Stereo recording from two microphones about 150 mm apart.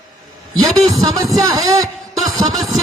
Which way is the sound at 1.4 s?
25° right (ahead or behind).